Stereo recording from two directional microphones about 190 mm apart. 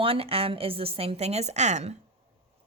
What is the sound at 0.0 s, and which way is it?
A woman's voice, 30° right (ahead or behind).